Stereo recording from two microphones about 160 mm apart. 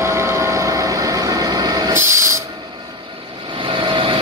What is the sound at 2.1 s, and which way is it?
Train, 20° right (ahead or behind).